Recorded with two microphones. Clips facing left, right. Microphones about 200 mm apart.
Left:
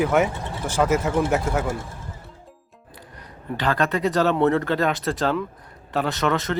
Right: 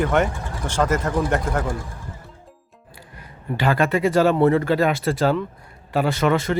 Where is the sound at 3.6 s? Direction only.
10° right (ahead or behind).